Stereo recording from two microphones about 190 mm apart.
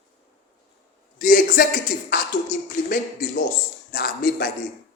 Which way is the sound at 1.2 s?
45° left (ahead or behind).